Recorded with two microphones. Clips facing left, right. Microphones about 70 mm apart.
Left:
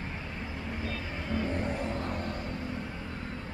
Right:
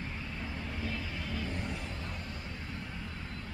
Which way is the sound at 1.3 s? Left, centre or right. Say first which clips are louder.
Left 9 dB; left.